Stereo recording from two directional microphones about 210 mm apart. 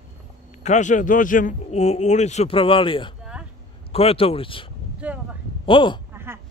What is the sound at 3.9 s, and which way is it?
Speech, 25° left (ahead or behind).